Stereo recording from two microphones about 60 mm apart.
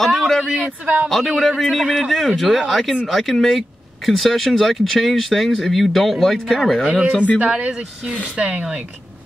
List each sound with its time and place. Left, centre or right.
0.0 s a sound: centre
0.6 s speech: right
1.0 s speech: centre
7.3 s speech: centre